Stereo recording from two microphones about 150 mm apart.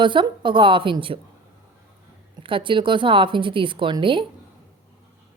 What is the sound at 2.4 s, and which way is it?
Speech, 35° right (ahead or behind).